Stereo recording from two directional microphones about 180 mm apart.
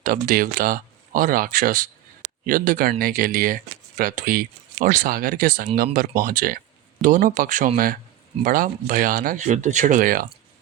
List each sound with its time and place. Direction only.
0.0 s speech: 50° right (ahead or behind)